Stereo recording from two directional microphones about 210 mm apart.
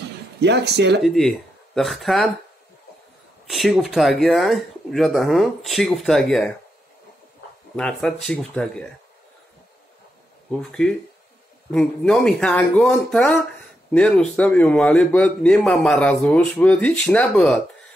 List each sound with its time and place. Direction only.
0.4 s speech: 55° right (ahead or behind)
1.0 s a man's voice: centre (ahead or behind)
3.4 s a man's voice: centre (ahead or behind)
7.7 s a man's voice: 5° left (ahead or behind)
10.6 s a man's voice: centre (ahead or behind)